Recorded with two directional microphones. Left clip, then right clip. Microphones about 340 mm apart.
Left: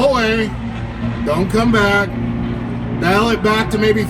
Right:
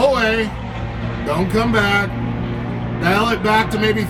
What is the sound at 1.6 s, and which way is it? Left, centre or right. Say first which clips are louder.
Speech: left 2 dB; centre.